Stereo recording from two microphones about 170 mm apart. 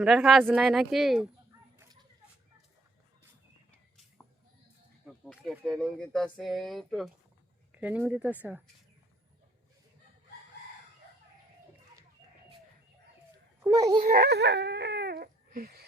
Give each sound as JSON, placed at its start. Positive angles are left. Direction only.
{"t": 0.0, "sound": "speech", "side_deg": 0}
{"t": 5.0, "sound": "speech", "side_deg": 0}
{"t": 13.6, "sound": "a child's voice", "side_deg": -20}
{"t": 14.0, "sound": "baby cry", "side_deg": -65}